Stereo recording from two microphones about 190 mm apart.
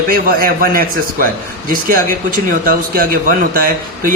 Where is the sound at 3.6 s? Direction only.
50° right (ahead or behind).